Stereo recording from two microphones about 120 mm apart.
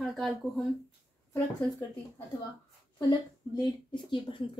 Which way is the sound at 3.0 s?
35° left (ahead or behind).